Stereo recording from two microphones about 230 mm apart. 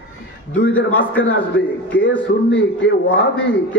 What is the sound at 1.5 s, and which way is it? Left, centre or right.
Speech, left.